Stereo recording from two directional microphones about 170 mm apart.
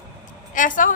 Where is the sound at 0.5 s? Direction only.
50° left (ahead or behind).